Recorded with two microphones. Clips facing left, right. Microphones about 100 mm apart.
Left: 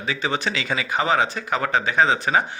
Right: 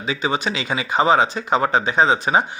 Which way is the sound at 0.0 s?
20° right (ahead or behind).